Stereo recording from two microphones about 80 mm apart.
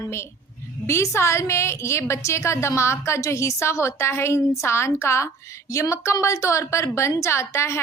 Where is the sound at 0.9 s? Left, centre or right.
Left.